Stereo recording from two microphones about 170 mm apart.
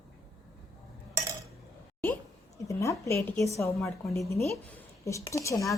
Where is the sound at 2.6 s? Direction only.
15° left (ahead or behind).